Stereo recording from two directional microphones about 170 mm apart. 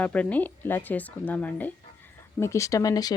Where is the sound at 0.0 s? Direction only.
10° left (ahead or behind).